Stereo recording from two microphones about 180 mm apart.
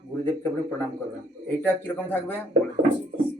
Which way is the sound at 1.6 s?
10° left (ahead or behind).